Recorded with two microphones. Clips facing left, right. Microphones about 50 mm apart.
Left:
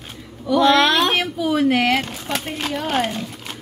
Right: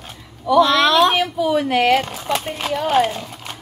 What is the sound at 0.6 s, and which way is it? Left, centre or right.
Speech, left.